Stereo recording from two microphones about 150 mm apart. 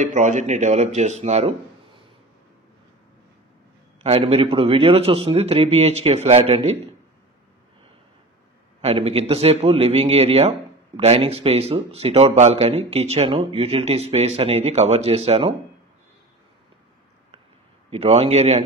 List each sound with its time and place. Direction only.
0.0 s speech: 55° right (ahead or behind)
4.0 s speech: 40° right (ahead or behind)
8.8 s speech: 40° right (ahead or behind)
17.8 s speech: 45° right (ahead or behind)